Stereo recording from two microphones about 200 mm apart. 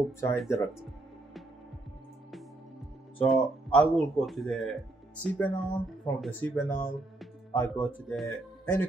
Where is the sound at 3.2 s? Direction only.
5° left (ahead or behind).